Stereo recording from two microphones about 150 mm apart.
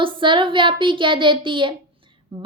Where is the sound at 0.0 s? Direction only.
35° right (ahead or behind).